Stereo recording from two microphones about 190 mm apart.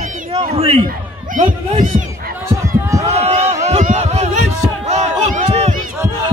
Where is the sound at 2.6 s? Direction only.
15° right (ahead or behind).